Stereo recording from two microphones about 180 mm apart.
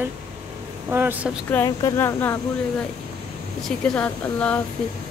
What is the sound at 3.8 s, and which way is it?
Speech, 5° left (ahead or behind).